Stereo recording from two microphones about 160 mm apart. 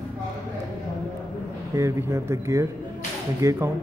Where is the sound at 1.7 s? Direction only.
15° right (ahead or behind).